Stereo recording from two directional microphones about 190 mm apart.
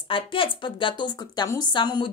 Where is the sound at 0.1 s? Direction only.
25° left (ahead or behind).